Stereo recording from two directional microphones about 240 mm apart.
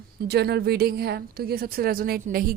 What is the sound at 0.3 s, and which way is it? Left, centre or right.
A woman's voice, right.